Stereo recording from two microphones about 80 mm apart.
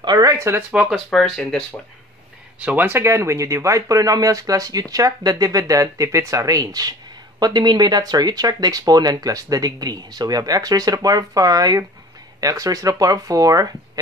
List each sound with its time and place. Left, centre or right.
0.0 s speech: right
0.4 s speech: right
0.8 s speech: centre
2.6 s speech: right